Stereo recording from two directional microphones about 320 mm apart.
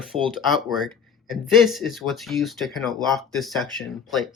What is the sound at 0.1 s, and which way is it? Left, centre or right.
Speech, centre.